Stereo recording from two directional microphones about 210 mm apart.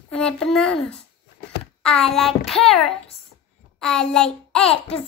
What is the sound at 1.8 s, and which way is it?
A child's voice, 5° left (ahead or behind).